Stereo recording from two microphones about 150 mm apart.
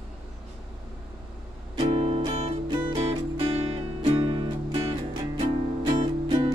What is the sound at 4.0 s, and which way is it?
Music, 35° right (ahead or behind).